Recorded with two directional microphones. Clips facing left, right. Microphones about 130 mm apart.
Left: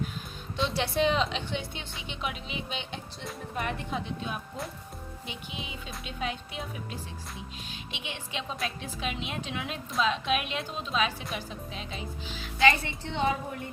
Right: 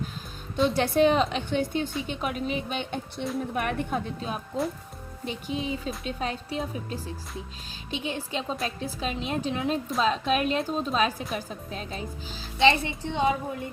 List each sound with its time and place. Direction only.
0.5 s a woman's voice: 50° right (ahead or behind)
5.2 s a woman's voice: 40° right (ahead or behind)
13.0 s a woman's voice: 15° right (ahead or behind)